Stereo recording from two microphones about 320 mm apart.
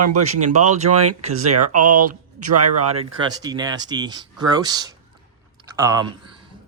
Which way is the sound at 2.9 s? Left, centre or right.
Centre.